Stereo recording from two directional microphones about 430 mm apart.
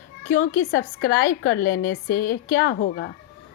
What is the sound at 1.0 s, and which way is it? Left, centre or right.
A woman's voice, left.